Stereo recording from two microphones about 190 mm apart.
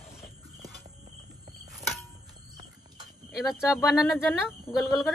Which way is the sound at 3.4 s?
Centre (ahead or behind).